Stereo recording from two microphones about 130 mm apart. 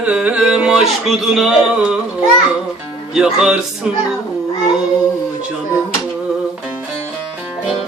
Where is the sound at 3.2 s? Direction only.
5° right (ahead or behind).